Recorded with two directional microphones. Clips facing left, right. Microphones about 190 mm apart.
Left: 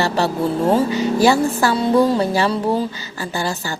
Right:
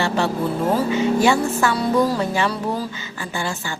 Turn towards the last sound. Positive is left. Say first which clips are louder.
# left 3 dB
turn(degrees=40)  # may be behind; listen again after turning